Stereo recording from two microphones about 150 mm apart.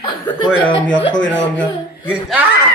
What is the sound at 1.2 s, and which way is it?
Speech, 5° left (ahead or behind).